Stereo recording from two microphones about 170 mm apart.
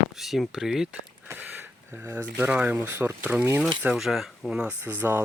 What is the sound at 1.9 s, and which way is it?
Speech, 10° right (ahead or behind).